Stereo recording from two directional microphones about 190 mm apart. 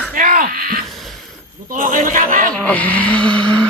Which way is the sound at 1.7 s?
45° right (ahead or behind).